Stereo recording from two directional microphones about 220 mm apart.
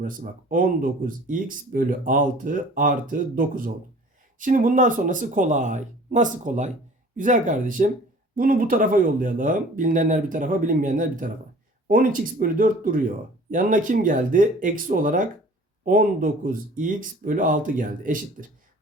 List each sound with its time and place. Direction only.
0.0 s speech: 40° right (ahead or behind)